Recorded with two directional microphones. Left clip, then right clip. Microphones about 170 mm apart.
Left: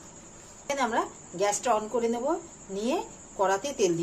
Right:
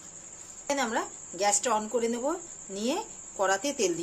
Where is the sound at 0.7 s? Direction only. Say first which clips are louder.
Left 2 dB; 25° right (ahead or behind).